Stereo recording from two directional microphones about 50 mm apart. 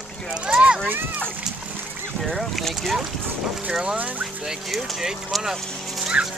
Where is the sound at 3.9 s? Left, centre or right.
Right.